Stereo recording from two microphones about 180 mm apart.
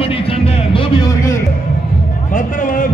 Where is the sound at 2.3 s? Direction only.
45° left (ahead or behind).